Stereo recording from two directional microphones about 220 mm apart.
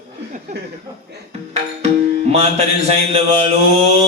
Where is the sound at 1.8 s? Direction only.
30° right (ahead or behind).